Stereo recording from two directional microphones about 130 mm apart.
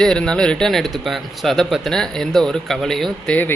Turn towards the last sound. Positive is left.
turn(degrees=10)  # may be behind; listen again after turning